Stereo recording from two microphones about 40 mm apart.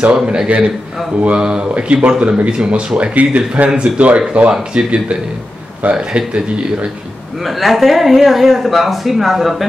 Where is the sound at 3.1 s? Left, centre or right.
Right.